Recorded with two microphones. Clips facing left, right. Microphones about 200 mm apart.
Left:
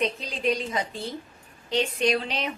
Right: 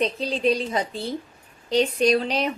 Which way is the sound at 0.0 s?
35° right (ahead or behind).